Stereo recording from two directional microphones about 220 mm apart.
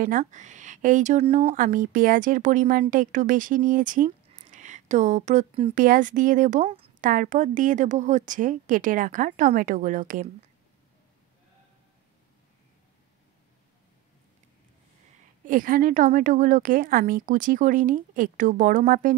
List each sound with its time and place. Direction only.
0.0 s a woman's voice: 35° right (ahead or behind)
5.9 s a woman's voice: 35° right (ahead or behind)
15.4 s a woman's voice: 40° right (ahead or behind)